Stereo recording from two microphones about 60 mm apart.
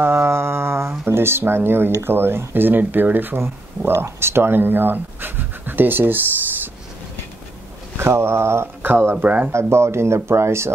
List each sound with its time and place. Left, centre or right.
0.0 s a sound: right
2.0 s speech: right
3.4 s speech: right
8.0 s speech: right
9.1 s speech: right
9.5 s speech: right